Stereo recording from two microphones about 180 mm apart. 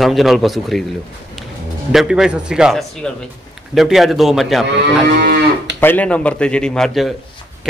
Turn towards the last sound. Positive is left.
turn(degrees=0)  # may be behind; listen again after turning